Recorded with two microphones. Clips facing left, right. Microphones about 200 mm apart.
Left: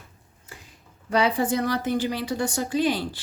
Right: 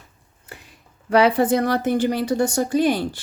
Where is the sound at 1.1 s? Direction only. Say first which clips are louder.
Right 6 dB; 60° right (ahead or behind).